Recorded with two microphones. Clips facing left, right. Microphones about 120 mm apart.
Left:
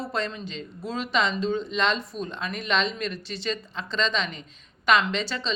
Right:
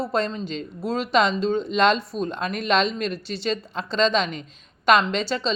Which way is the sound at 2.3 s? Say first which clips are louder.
Right 5 dB; 45° right (ahead or behind).